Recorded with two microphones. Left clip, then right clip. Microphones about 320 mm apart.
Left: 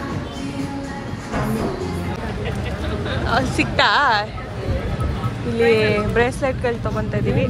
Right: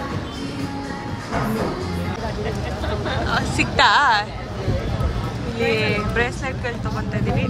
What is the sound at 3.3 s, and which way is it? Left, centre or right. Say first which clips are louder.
Speech: left 4 dB; centre.